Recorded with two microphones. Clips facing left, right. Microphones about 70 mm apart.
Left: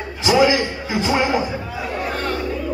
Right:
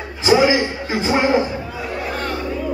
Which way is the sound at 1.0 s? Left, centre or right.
Right.